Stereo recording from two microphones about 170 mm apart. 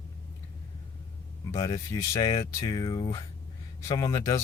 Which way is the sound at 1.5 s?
20° left (ahead or behind).